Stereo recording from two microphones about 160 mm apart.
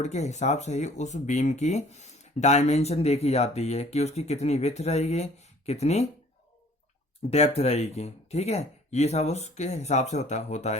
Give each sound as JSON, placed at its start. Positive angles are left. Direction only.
{"t": 0.0, "sound": "speech", "side_deg": 45}
{"t": 7.3, "sound": "speech", "side_deg": 40}